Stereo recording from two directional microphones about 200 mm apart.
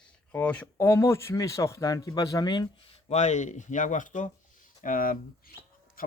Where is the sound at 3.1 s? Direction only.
35° left (ahead or behind).